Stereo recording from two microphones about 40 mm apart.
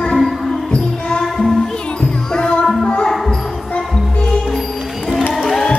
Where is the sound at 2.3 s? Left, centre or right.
Left.